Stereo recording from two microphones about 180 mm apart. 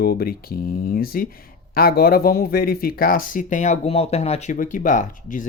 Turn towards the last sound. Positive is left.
turn(degrees=45)  # may be behind; listen again after turning